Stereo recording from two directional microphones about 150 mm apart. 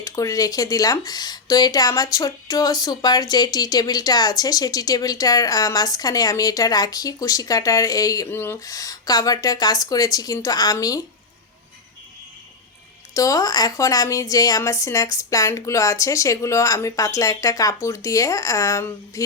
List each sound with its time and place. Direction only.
0.0 s speech: 20° left (ahead or behind)
13.1 s speech: 25° left (ahead or behind)